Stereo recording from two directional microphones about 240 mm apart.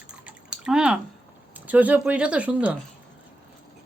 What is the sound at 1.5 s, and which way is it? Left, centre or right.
Speech, centre.